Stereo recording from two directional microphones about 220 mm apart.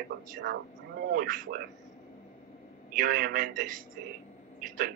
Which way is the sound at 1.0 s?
40° right (ahead or behind).